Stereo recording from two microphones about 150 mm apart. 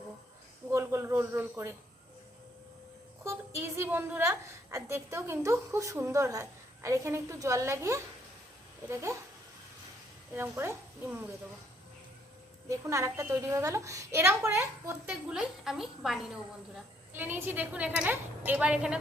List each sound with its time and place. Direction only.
0.7 s speech: 15° right (ahead or behind)
3.2 s a woman's voice: 20° right (ahead or behind)
10.3 s a woman's voice: 15° right (ahead or behind)
12.6 s a woman's voice: 20° right (ahead or behind)
15.1 s a woman's voice: 5° right (ahead or behind)
17.2 s a woman's voice: 15° right (ahead or behind)